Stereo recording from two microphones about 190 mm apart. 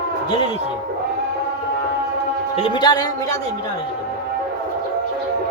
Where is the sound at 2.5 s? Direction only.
25° left (ahead or behind).